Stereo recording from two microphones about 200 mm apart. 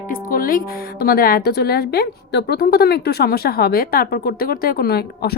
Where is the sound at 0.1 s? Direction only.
45° left (ahead or behind).